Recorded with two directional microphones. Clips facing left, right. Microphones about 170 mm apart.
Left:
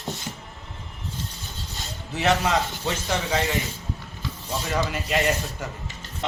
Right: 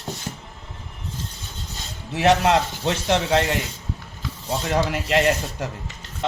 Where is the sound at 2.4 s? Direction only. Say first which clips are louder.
Right 5 dB; 75° right (ahead or behind).